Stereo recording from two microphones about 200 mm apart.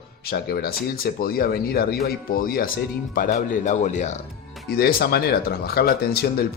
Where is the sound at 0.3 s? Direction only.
50° left (ahead or behind).